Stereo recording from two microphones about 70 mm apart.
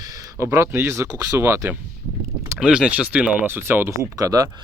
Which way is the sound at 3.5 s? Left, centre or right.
Right.